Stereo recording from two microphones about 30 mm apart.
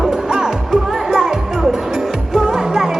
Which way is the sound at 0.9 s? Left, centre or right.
Centre.